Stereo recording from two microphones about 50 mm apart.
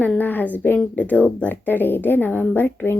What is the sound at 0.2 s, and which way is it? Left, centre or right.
A woman's voice, left.